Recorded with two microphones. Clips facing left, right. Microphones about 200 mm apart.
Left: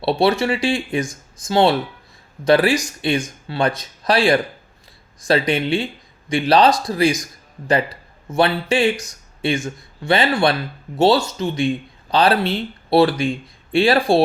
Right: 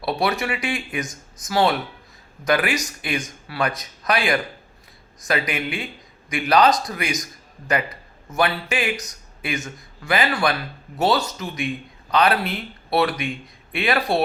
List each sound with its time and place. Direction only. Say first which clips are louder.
0.0 s speech: left 6 dB; 30° left (ahead or behind)
8.3 s speech: left 5 dB; 30° left (ahead or behind)